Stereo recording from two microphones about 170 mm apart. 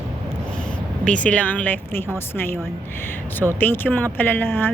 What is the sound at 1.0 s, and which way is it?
Speech, 5° left (ahead or behind).